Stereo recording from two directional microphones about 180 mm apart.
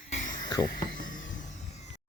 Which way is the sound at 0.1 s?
40° left (ahead or behind).